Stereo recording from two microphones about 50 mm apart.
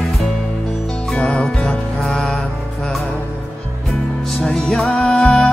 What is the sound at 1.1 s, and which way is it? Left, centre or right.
Music, left.